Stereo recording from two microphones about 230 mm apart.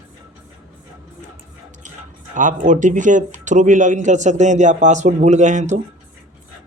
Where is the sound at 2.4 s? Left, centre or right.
Right.